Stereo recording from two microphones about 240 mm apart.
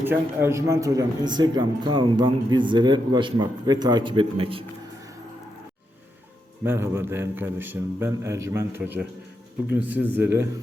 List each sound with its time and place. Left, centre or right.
0.0 s a man's voice: centre
6.7 s a man's voice: centre